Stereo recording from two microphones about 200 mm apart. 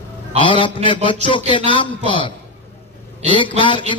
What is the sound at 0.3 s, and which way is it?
A man's voice, 25° left (ahead or behind).